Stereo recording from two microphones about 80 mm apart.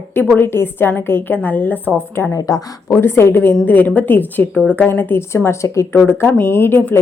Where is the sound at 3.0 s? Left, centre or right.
Left.